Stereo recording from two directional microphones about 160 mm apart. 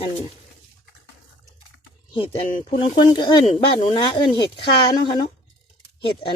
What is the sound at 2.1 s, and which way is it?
Speech, 35° left (ahead or behind).